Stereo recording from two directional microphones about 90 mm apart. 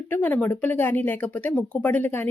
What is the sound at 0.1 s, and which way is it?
Speech, 20° left (ahead or behind).